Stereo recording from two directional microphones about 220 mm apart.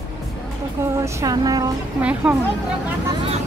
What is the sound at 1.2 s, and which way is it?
Speech, 15° right (ahead or behind).